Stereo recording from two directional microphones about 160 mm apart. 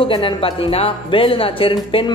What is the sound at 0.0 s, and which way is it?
Speech, 35° left (ahead or behind).